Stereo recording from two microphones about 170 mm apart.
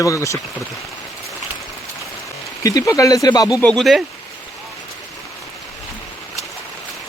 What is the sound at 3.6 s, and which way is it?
Speech, 5° left (ahead or behind).